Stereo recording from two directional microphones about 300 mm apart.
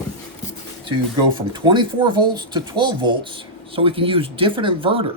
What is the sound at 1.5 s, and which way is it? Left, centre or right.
Speech, centre.